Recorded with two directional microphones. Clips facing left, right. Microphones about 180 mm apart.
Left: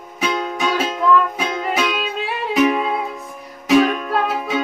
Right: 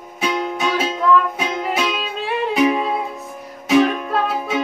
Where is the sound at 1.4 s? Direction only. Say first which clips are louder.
Even; 5° right (ahead or behind).